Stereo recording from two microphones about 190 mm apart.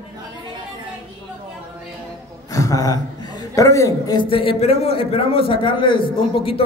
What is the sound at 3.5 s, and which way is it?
A man's voice, 15° left (ahead or behind).